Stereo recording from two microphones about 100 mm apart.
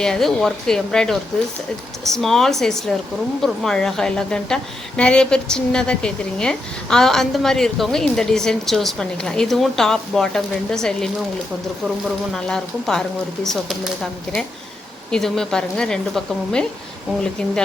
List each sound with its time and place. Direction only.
0.0 s a woman's voice: 5° left (ahead or behind)
12.3 s a woman's voice: 5° left (ahead or behind)